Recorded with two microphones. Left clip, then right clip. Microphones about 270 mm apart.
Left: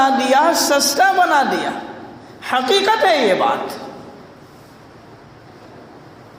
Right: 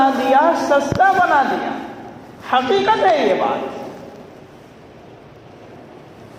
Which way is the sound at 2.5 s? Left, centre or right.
Left.